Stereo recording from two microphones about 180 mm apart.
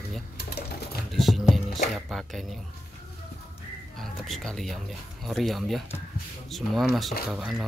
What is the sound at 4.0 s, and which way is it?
Speech, centre (ahead or behind).